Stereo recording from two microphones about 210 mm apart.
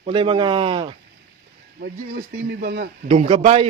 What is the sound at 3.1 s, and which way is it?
Speech, 30° right (ahead or behind).